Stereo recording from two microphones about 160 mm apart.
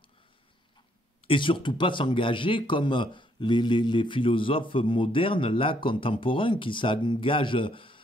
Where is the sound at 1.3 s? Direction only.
30° left (ahead or behind).